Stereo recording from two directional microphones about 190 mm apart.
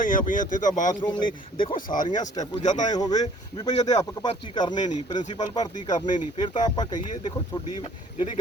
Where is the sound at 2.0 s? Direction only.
20° left (ahead or behind).